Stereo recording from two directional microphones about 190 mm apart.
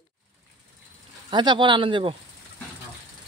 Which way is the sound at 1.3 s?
25° right (ahead or behind).